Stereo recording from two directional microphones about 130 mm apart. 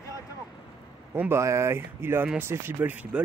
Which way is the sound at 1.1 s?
20° right (ahead or behind).